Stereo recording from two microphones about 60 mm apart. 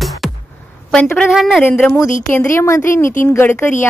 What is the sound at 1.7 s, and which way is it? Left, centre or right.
Speech, left.